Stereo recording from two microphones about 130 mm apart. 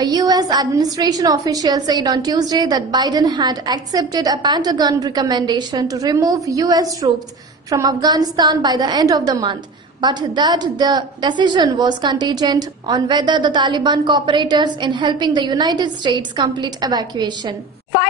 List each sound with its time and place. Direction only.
0.0 s a woman's voice: 30° right (ahead or behind)